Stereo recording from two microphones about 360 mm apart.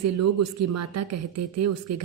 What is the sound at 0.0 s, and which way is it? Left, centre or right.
Speech, right.